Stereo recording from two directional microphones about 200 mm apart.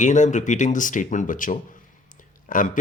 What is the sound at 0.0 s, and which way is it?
Speech, 40° left (ahead or behind).